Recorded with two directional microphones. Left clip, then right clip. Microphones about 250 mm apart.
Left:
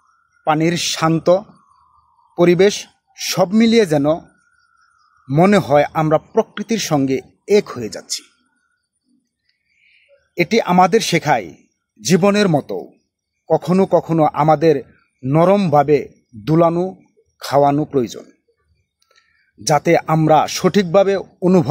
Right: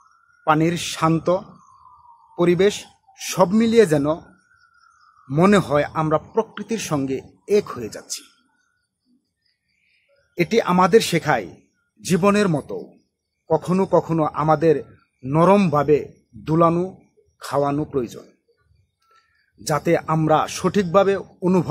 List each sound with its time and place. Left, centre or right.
0.4 s a man's voice: left
5.2 s a man's voice: left
9.8 s a man's voice: left